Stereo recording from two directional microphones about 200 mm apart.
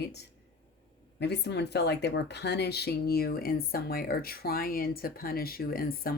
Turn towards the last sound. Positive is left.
turn(degrees=45)  # may be behind; listen again after turning